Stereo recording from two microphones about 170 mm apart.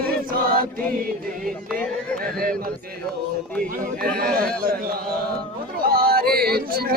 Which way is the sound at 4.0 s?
60° right (ahead or behind).